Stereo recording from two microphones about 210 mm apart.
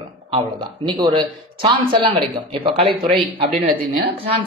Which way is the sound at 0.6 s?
25° right (ahead or behind).